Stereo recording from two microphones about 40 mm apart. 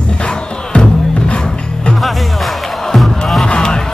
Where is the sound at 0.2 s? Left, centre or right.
Left.